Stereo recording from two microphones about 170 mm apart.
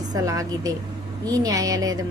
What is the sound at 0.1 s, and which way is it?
A woman's voice, 20° right (ahead or behind).